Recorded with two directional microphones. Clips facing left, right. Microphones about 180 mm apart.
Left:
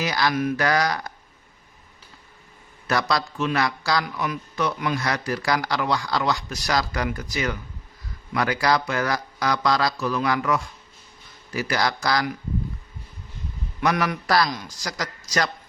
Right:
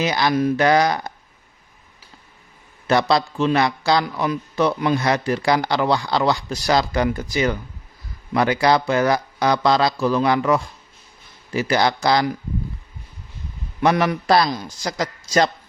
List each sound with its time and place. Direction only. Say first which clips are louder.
0.0 s a man's voice: right 4 dB; 25° right (ahead or behind)
2.8 s a man's voice: right 6 dB; 25° right (ahead or behind)
13.8 s a man's voice: right 5 dB; 30° right (ahead or behind)